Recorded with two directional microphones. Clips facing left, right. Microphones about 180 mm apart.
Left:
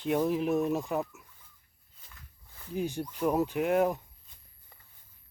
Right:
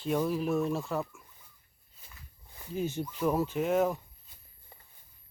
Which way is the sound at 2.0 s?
10° right (ahead or behind).